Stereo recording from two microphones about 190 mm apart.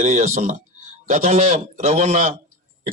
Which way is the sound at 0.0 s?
35° right (ahead or behind).